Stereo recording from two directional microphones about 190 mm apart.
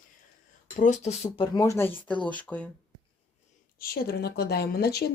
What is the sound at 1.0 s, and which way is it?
Speech, 30° left (ahead or behind).